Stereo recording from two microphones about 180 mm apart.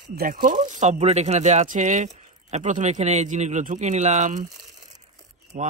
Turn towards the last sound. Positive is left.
turn(degrees=-45)  # may be behind; listen again after turning